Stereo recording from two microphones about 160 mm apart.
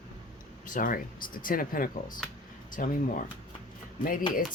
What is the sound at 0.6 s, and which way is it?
Speech, 55° left (ahead or behind).